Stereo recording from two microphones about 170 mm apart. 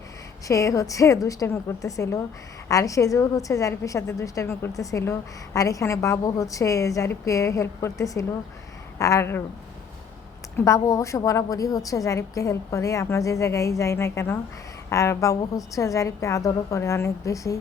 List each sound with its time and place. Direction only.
0.4 s a woman's voice: 20° left (ahead or behind)
10.6 s a woman's voice: 20° left (ahead or behind)